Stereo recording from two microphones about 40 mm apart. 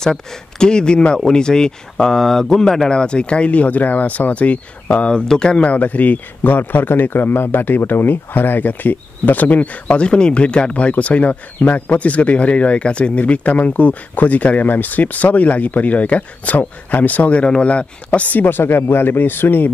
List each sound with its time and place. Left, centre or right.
0.0 s speech: centre
2.9 s a man's voice: left
5.1 s speech: left
5.7 s a man's voice: left
18.4 s speech: left